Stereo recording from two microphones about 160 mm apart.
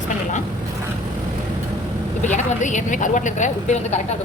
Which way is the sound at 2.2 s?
50° left (ahead or behind).